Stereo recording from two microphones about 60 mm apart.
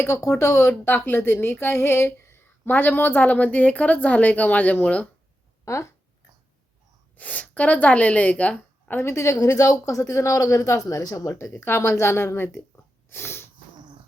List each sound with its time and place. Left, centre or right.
0.1 s a woman's voice: left
0.7 s speech: left
5.6 s a woman's voice: left
7.2 s a woman's voice: left
9.0 s a woman's voice: left
11.3 s a woman's voice: left
11.6 s a woman's voice: left
13.1 s sneeze: left